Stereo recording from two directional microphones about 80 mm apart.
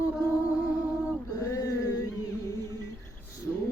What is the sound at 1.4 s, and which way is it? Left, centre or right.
Male singing, left.